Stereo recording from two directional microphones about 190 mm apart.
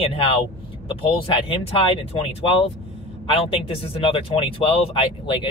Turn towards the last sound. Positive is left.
turn(degrees=30)  # may be behind; listen again after turning